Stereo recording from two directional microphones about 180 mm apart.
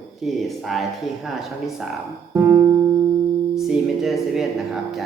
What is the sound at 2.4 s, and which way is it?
Music, 15° right (ahead or behind).